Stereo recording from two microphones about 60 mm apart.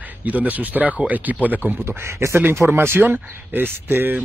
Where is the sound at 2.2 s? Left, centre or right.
Right.